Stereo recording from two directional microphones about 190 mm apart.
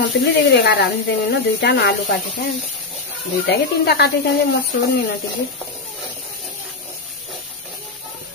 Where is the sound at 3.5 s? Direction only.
60° left (ahead or behind).